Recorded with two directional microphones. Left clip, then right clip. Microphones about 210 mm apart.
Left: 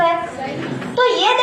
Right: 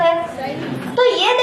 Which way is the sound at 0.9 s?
35° right (ahead or behind).